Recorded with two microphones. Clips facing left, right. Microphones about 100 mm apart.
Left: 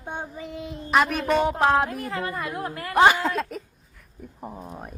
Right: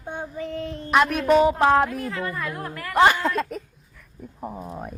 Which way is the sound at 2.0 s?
15° left (ahead or behind).